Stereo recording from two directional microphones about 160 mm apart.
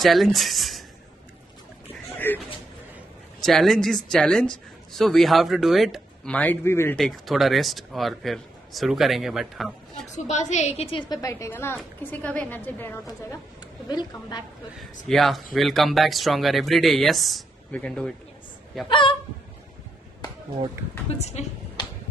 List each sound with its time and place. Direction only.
0.0 s speech: centre (ahead or behind)
2.1 s a sound: 10° left (ahead or behind)
3.3 s speech: centre (ahead or behind)
7.0 s speech: centre (ahead or behind)
10.3 s a woman's voice: 45° left (ahead or behind); by 13.0 s 10° left (ahead or behind)
13.8 s a woman's voice: 25° left (ahead or behind)
15.0 s speech: centre (ahead or behind)
18.9 s a woman's voice: 30° left (ahead or behind)
21.2 s speech: 45° left (ahead or behind)